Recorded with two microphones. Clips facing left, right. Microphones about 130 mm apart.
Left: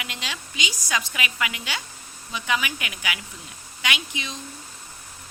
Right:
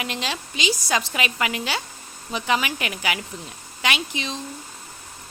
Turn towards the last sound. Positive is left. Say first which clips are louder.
# right 4 dB
turn(degrees=-35)  # may be behind; listen again after turning